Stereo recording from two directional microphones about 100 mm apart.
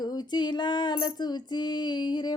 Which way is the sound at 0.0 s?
45° left (ahead or behind).